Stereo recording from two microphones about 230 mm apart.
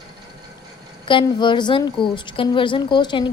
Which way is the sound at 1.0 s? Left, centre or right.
Centre.